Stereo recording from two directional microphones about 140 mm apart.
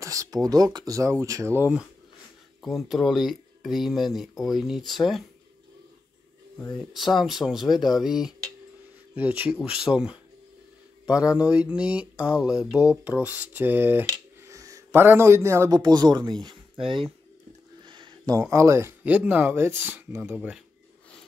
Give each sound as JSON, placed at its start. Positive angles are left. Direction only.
{"t": 0.0, "sound": "speech", "side_deg": -25}
{"t": 2.6, "sound": "speech", "side_deg": 0}
{"t": 6.8, "sound": "speech", "side_deg": 0}
{"t": 15.8, "sound": "speech", "side_deg": -30}
{"t": 17.8, "sound": "a sound", "side_deg": -35}
{"t": 18.4, "sound": "speech", "side_deg": -20}